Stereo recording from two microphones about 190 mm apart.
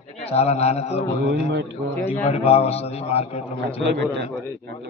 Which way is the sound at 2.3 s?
30° left (ahead or behind).